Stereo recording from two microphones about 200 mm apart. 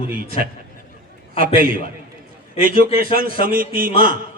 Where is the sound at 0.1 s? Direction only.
45° right (ahead or behind).